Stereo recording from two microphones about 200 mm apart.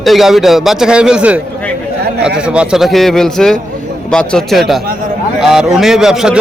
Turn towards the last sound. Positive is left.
turn(degrees=-5)  # may be behind; listen again after turning